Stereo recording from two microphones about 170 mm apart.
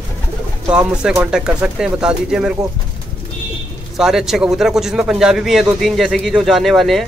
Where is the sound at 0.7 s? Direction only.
10° right (ahead or behind).